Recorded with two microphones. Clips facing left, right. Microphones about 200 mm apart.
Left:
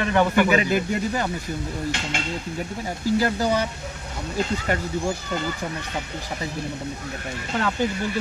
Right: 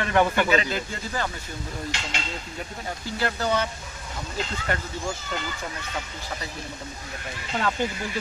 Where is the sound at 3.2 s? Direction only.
10° left (ahead or behind).